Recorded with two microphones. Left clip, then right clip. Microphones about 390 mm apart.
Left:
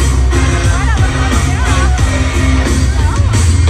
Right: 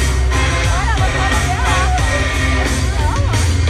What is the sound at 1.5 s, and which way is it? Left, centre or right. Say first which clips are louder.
Music: even; centre.